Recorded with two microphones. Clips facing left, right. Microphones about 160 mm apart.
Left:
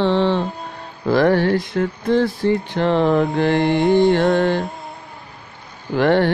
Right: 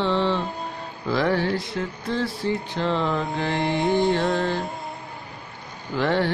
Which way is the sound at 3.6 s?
Centre (ahead or behind).